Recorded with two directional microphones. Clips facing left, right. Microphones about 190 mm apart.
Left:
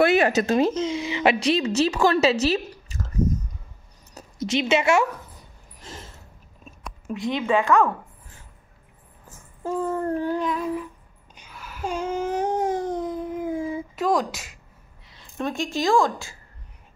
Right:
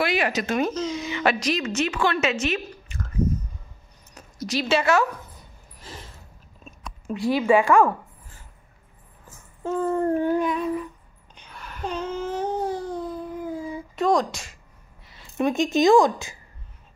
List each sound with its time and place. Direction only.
0.2 s speech: 45° left (ahead or behind)
0.6 s a woman's voice: 25° left (ahead or behind)
4.4 s speech: 20° left (ahead or behind)
6.8 s a woman's voice: centre (ahead or behind)
9.6 s a sound: 5° left (ahead or behind)
10.3 s speech: 5° right (ahead or behind)
11.3 s babbling: 5° left (ahead or behind); by 13.8 s 20° left (ahead or behind)
13.9 s speech: 5° left (ahead or behind)
15.3 s a woman's voice: 15° right (ahead or behind)